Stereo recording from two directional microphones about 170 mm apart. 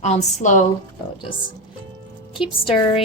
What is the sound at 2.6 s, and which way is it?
Speech, 35° left (ahead or behind).